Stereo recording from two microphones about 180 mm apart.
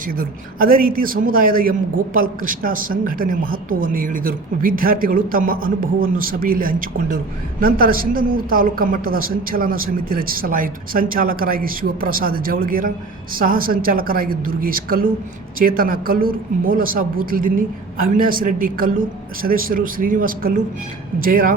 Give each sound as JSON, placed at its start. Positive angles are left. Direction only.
{"t": 0.1, "sound": "a woman's voice", "side_deg": -55}